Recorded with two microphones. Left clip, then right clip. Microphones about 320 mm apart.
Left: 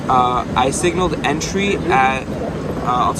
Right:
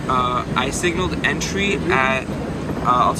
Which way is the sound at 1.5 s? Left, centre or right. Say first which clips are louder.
Left 5 dB; centre.